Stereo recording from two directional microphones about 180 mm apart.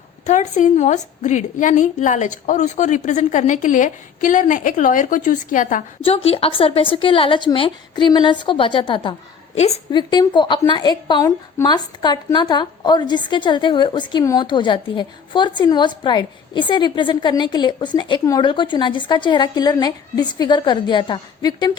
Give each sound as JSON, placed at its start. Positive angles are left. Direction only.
{"t": 0.3, "sound": "a woman's voice", "side_deg": 40}
{"t": 6.0, "sound": "a woman's voice", "side_deg": 30}